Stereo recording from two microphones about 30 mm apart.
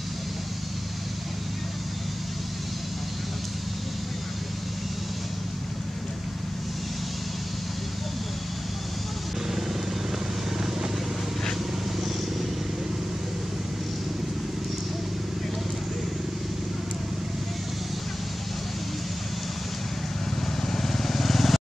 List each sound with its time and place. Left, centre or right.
20.6 s vehicle: centre